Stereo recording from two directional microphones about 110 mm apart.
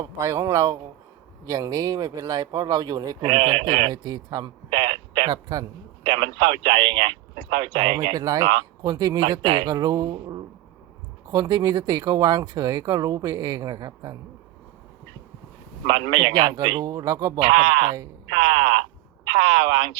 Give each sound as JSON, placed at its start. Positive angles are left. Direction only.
{"t": 0.0, "sound": "speech", "side_deg": -25}
{"t": 1.5, "sound": "speech", "side_deg": -35}
{"t": 4.7, "sound": "radio", "side_deg": -55}
{"t": 6.0, "sound": "speech", "side_deg": -50}
{"t": 8.4, "sound": "speech", "side_deg": -55}
{"t": 8.9, "sound": "speech", "side_deg": -40}
{"t": 15.9, "sound": "speech", "side_deg": -55}
{"t": 17.5, "sound": "speech", "side_deg": -55}